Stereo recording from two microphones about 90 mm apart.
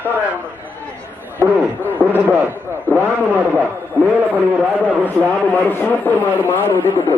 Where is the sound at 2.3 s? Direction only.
20° right (ahead or behind).